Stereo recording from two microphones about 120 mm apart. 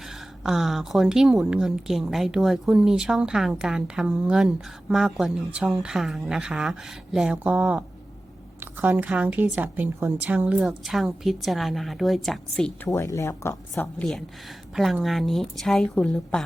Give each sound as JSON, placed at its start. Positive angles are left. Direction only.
{"t": 0.0, "sound": "speech", "side_deg": -5}
{"t": 12.9, "sound": "speech", "side_deg": 25}
{"t": 14.0, "sound": "speech", "side_deg": 5}